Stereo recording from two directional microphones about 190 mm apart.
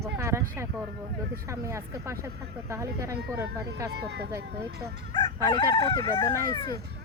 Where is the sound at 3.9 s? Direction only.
60° right (ahead or behind).